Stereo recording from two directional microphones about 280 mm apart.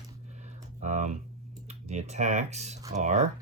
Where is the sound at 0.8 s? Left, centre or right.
Right.